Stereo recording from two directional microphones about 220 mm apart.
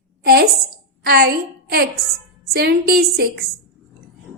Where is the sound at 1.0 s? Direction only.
45° right (ahead or behind).